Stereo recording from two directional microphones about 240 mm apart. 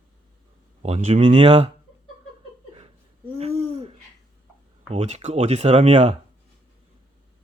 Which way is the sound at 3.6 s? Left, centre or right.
Right.